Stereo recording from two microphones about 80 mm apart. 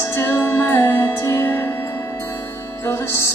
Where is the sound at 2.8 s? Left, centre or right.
Left.